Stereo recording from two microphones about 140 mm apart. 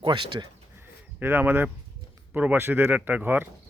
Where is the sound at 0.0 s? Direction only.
35° right (ahead or behind).